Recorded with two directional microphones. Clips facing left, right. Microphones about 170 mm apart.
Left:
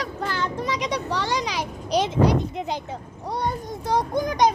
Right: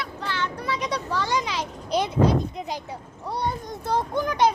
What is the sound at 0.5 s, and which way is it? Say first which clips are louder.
A child's voice: left 2 dB; 20° left (ahead or behind).